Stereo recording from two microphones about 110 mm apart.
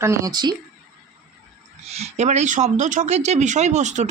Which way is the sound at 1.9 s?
75° right (ahead or behind).